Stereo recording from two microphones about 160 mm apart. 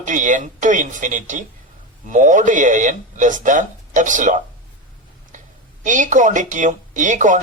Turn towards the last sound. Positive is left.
turn(degrees=-50)  # may be behind; listen again after turning